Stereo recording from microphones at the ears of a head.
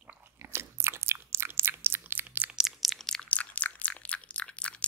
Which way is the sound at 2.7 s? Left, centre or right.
Centre.